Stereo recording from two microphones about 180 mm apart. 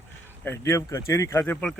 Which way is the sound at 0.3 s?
10° left (ahead or behind).